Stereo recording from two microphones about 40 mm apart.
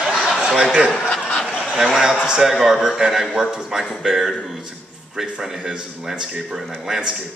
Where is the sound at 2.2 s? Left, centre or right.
Centre.